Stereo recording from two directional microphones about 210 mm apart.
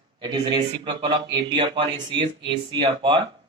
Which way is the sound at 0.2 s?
20° right (ahead or behind).